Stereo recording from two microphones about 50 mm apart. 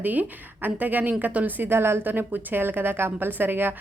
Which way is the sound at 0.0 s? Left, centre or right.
Right.